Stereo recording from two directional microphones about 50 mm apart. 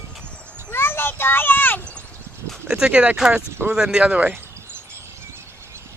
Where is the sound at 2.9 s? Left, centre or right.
Right.